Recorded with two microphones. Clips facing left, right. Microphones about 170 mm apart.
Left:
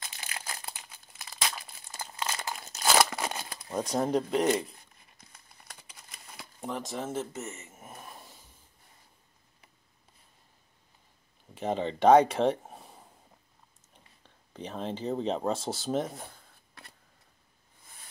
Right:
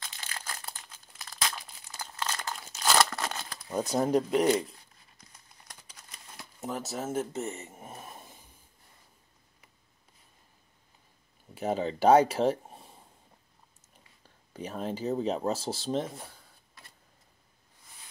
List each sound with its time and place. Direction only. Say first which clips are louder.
0.0 s crumpling: even; 15° left (ahead or behind)
3.6 s speech: right 1 dB; 5° right (ahead or behind)
6.3 s speech: even; 5° right (ahead or behind)
7.3 s speech: right 5 dB; 35° right (ahead or behind)
7.9 s a sound: right 2 dB; 20° right (ahead or behind)
11.5 s speech: right 1 dB; 5° right (ahead or behind)
14.2 s speech: right 1 dB; 10° right (ahead or behind)